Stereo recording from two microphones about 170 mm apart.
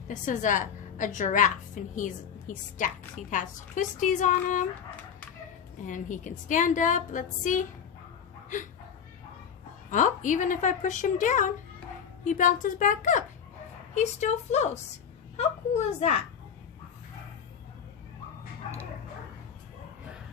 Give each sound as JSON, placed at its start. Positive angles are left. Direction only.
{"t": 0.3, "sound": "a woman's voice", "side_deg": 50}
{"t": 5.8, "sound": "a woman's voice", "side_deg": 50}
{"t": 9.9, "sound": "a woman's voice", "side_deg": 50}